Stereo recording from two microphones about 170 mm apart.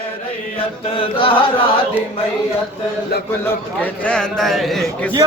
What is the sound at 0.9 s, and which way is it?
Chant, 30° left (ahead or behind).